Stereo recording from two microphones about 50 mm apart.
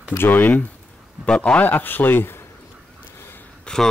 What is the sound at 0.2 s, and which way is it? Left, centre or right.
Speech, left.